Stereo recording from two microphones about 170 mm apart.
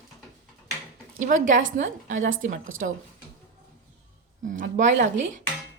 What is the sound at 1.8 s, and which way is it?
A woman's voice, 45° right (ahead or behind).